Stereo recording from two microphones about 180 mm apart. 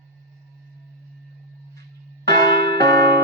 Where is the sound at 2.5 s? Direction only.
65° right (ahead or behind).